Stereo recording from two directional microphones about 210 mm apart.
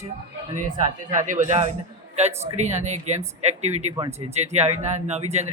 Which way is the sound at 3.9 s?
20° right (ahead or behind).